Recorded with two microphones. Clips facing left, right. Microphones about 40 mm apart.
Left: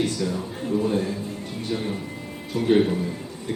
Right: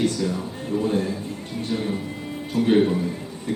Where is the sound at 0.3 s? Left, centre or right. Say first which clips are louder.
Even; right.